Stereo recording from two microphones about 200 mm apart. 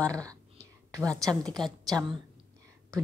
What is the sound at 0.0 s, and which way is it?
Speech, 15° right (ahead or behind).